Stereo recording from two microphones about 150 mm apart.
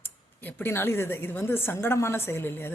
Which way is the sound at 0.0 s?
15° left (ahead or behind).